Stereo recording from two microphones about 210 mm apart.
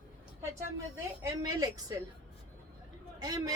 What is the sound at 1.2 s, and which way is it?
Speech, 20° right (ahead or behind).